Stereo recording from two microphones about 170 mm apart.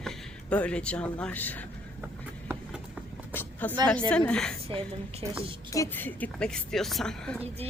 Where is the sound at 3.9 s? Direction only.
5° left (ahead or behind).